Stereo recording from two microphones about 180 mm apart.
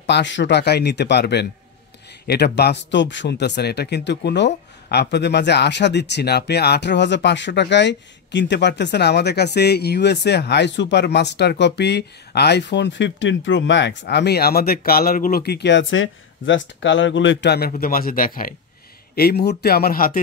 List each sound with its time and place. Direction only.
0.0 s a man's voice: 80° left; by 20.2 s 55° left (ahead or behind)